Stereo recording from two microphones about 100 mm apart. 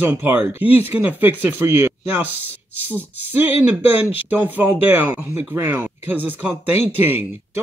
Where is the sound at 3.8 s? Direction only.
15° right (ahead or behind).